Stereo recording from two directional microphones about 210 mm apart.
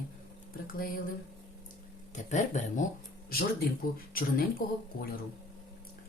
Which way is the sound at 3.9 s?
45° left (ahead or behind).